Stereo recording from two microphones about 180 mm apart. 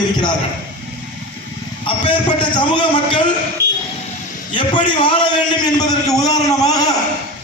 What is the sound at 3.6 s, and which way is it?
Vehicle, 65° right (ahead or behind).